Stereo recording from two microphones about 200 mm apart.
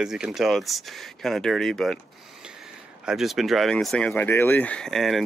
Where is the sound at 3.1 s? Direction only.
Centre (ahead or behind).